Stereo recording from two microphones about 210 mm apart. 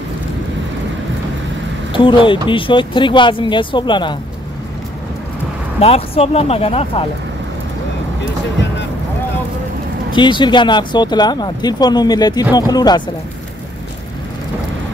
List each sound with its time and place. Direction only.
1.9 s speech: 25° left (ahead or behind)
5.8 s speech: 30° left (ahead or behind)
10.1 s speech: 20° left (ahead or behind)